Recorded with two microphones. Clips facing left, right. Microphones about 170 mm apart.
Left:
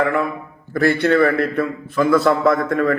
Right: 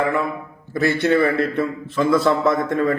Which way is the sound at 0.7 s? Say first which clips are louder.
Left 2 dB; 20° right (ahead or behind).